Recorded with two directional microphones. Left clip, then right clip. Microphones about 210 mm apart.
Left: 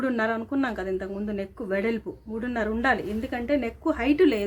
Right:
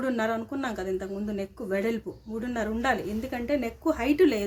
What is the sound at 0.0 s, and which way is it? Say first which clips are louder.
A woman's voice: left 2 dB; 15° left (ahead or behind).